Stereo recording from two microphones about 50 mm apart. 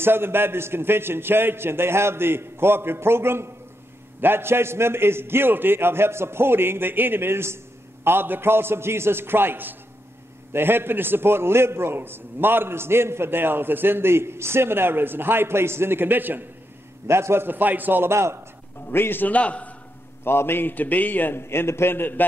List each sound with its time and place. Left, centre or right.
0.0 s a man's voice: right
17.1 s a man's voice: right
18.0 s a man's voice: right
18.9 s a man's voice: left
19.2 s a man's voice: left
20.2 s a man's voice: left
21.4 s a man's voice: left
21.9 s a man's voice: left